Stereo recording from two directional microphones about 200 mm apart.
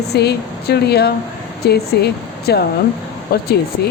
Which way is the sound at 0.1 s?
55° left (ahead or behind).